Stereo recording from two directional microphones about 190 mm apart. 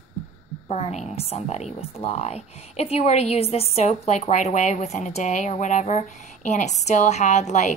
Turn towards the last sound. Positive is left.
turn(degrees=35)  # may be behind; listen again after turning